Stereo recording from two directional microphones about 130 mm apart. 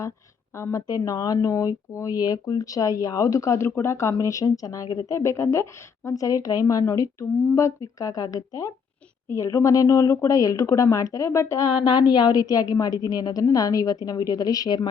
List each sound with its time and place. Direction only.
0.5 s speech: 25° left (ahead or behind)